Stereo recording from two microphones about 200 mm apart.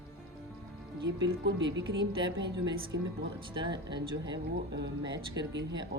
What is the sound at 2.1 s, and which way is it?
Speech, 25° right (ahead or behind).